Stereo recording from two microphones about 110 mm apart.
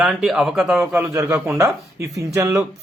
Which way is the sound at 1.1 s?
25° right (ahead or behind).